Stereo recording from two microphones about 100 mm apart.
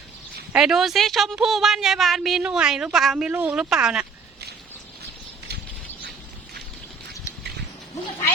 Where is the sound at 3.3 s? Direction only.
15° right (ahead or behind).